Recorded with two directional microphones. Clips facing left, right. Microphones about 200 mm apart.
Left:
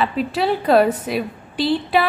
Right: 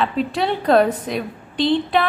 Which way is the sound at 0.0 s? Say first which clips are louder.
Even; 5° left (ahead or behind).